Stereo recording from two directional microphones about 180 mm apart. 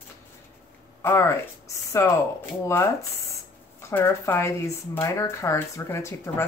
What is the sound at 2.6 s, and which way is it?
Speech, 15° left (ahead or behind).